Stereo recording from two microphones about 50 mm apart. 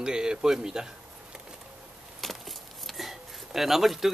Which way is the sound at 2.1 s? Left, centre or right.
Centre.